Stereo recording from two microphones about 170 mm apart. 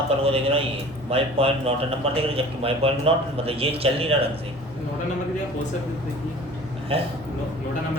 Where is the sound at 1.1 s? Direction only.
35° right (ahead or behind).